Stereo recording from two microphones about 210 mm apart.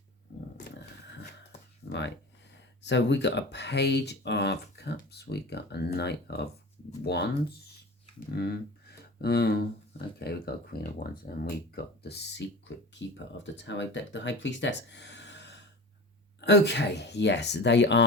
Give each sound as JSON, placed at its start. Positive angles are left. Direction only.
{"t": 1.8, "sound": "a sound", "side_deg": 55}
{"t": 2.8, "sound": "speech", "side_deg": 55}
{"t": 8.4, "sound": "speech", "side_deg": 50}